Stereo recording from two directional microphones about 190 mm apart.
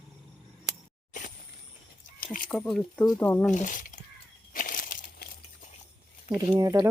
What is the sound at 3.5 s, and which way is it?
Speech, 45° left (ahead or behind).